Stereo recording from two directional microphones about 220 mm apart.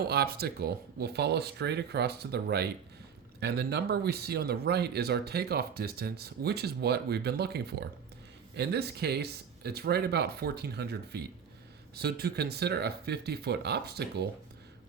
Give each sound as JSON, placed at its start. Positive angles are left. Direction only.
{"t": 0.1, "sound": "speech", "side_deg": -45}